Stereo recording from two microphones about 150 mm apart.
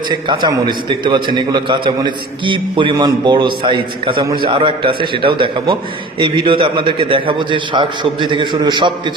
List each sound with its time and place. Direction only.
0.1 s a man's voice: 30° right (ahead or behind)